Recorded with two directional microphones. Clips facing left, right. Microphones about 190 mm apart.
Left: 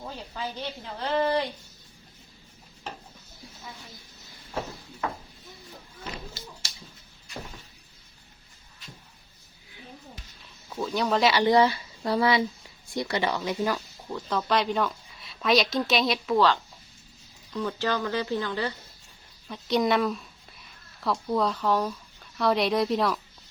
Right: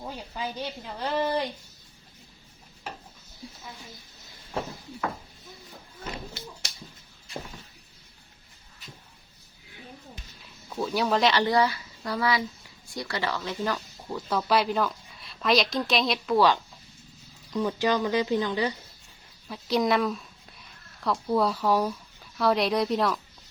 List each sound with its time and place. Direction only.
0.0 s a woman's voice: 10° right (ahead or behind)
10.7 s speech: 5° right (ahead or behind)
11.4 s speech: 20° left (ahead or behind)
14.1 s speech: 5° right (ahead or behind)
17.5 s a woman's voice: 15° right (ahead or behind)
19.5 s speech: centre (ahead or behind)